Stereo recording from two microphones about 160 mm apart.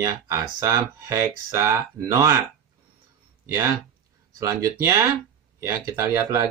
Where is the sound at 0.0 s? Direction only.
20° right (ahead or behind).